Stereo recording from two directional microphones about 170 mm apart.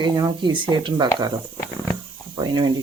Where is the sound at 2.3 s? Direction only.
25° right (ahead or behind).